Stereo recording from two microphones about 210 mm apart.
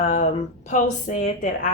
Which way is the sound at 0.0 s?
35° left (ahead or behind).